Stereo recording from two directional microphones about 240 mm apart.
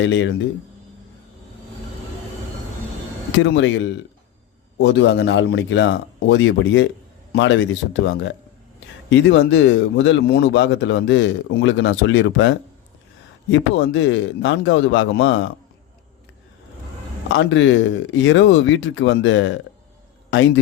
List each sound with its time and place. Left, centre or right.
0.0 s speech: left
3.3 s speech: left
17.2 s speech: left